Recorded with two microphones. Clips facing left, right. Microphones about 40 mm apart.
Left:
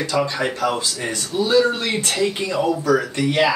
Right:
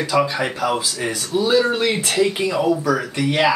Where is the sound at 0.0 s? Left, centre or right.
Centre.